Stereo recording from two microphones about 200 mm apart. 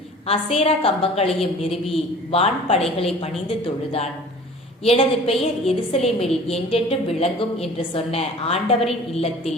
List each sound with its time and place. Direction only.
0.3 s a woman's voice: 30° left (ahead or behind)